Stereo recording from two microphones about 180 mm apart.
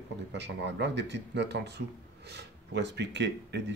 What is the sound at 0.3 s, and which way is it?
Speech, 75° right (ahead or behind).